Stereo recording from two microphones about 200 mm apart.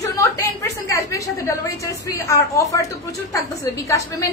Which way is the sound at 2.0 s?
15° left (ahead or behind).